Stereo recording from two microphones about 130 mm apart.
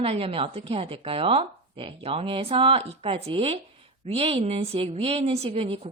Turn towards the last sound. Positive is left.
turn(degrees=-45)  # may be behind; listen again after turning